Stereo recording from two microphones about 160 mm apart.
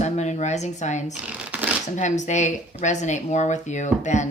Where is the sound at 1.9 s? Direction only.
50° left (ahead or behind).